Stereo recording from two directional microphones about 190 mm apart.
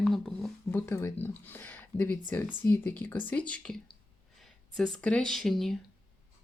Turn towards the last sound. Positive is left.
turn(degrees=0)  # may be behind; listen again after turning